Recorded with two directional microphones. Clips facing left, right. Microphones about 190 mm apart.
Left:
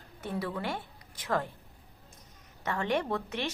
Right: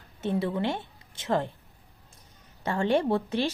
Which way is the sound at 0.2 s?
25° right (ahead or behind).